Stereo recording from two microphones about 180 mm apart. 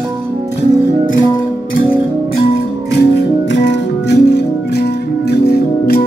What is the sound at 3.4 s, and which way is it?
Music, 75° left (ahead or behind).